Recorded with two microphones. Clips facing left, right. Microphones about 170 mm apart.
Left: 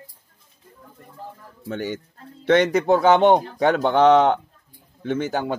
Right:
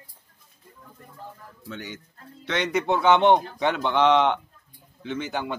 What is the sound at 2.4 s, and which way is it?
Chicken, 50° left (ahead or behind).